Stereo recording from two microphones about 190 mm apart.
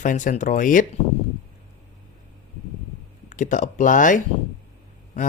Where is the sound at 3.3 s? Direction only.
40° left (ahead or behind).